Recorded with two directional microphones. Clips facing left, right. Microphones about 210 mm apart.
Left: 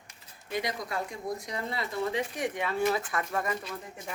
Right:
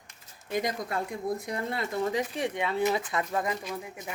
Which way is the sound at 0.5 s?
50° right (ahead or behind).